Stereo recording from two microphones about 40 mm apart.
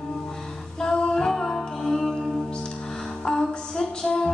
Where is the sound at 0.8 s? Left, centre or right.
Left.